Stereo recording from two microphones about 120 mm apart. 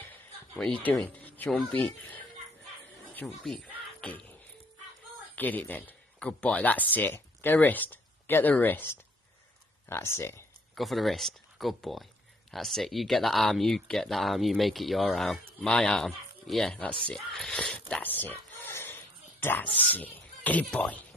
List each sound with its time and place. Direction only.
0.6 s speech: 5° left (ahead or behind)
1.2 s cat: 15° left (ahead or behind)
1.6 s speech: 10° left (ahead or behind)
3.4 s music: 10° left (ahead or behind)
5.3 s speech: 15° left (ahead or behind)
10.7 s speech: centre (ahead or behind)